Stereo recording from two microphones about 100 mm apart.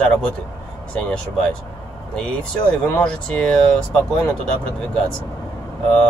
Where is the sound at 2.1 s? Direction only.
10° left (ahead or behind).